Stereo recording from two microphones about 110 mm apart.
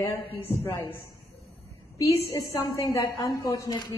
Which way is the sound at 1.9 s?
30° left (ahead or behind).